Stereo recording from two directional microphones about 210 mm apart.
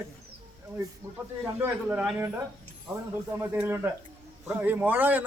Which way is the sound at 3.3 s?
10° right (ahead or behind).